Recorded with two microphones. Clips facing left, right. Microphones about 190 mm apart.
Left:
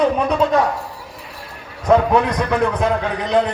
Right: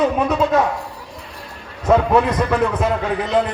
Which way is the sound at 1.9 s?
5° right (ahead or behind).